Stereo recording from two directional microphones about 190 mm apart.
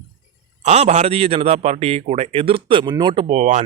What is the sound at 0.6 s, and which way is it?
A man's voice, 35° right (ahead or behind).